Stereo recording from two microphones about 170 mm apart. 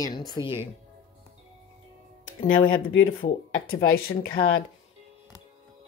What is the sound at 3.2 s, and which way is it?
Speech, 60° left (ahead or behind).